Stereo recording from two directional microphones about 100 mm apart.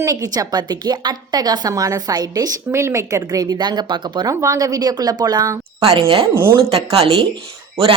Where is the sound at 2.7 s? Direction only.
30° right (ahead or behind); by 4.3 s 50° right (ahead or behind).